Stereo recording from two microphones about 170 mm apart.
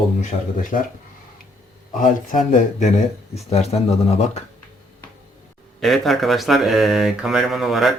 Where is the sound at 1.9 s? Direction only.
50° left (ahead or behind).